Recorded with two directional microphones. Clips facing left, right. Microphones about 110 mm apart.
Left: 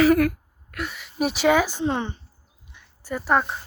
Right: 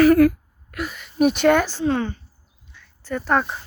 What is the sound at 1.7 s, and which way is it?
Speech, 20° left (ahead or behind).